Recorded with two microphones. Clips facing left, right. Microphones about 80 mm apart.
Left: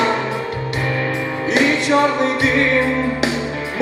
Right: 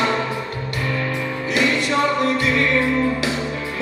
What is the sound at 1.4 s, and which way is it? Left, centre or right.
Music, left.